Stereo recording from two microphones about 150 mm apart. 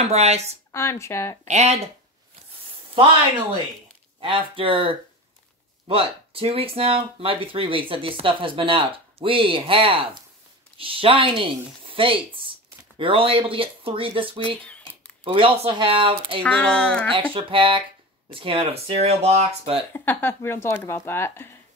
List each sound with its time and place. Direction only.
0.0 s speech: 45° right (ahead or behind)
0.7 s speech: 20° left (ahead or behind)
1.4 s speech: 45° right (ahead or behind)
4.2 s speech: 35° right (ahead or behind)
16.4 s speech: 10° left (ahead or behind)
17.1 s speech: 35° right (ahead or behind)
19.9 s speech: 15° left (ahead or behind)